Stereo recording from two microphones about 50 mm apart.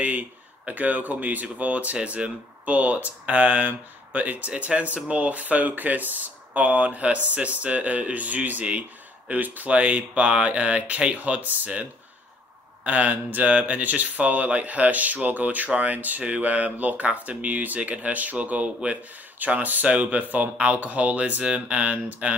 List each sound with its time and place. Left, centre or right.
0.0 s speech: right
9.7 s speech: right
12.8 s speech: right